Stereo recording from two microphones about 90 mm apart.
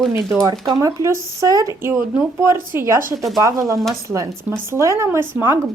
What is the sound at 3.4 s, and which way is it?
Speech, 40° right (ahead or behind).